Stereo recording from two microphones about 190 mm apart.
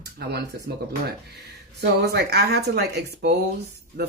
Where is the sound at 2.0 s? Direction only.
60° right (ahead or behind).